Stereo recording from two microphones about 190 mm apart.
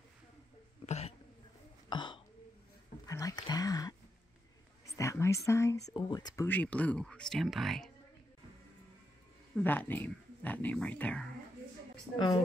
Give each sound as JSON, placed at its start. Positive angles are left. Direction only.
{"t": 0.8, "sound": "hiccup", "side_deg": 35}
{"t": 1.9, "sound": "throat clearing", "side_deg": 25}
{"t": 3.1, "sound": "speech", "side_deg": 20}
{"t": 4.9, "sound": "speech", "side_deg": 15}
{"t": 9.6, "sound": "speech", "side_deg": 10}